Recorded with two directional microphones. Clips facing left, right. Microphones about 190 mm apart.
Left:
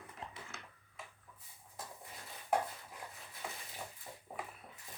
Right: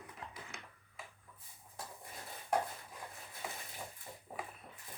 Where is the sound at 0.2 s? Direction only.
25° left (ahead or behind).